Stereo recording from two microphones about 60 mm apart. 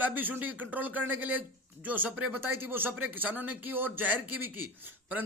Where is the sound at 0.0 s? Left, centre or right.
Right.